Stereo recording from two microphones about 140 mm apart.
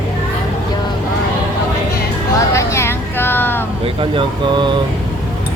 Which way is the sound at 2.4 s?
20° left (ahead or behind).